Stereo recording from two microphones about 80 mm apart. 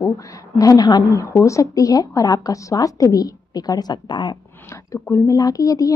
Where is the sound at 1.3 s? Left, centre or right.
Left.